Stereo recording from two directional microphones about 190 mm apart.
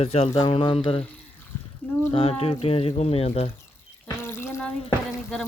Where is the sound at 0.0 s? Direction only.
30° left (ahead or behind).